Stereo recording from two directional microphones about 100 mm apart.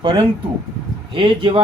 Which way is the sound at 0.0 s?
65° right (ahead or behind).